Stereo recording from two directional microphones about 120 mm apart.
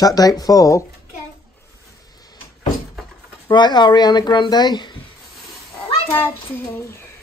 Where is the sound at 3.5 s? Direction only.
40° left (ahead or behind).